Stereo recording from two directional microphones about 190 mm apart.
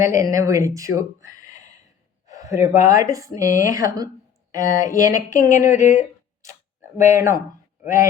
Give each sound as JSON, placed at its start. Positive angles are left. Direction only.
{"t": 0.0, "sound": "speech", "side_deg": -15}
{"t": 5.3, "sound": "speech", "side_deg": 45}
{"t": 7.0, "sound": "speech", "side_deg": -15}